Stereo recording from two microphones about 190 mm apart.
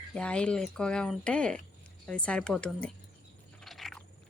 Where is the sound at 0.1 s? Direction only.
5° left (ahead or behind).